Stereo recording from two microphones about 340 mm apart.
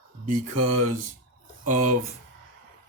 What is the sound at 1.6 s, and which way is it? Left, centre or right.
Speech, right.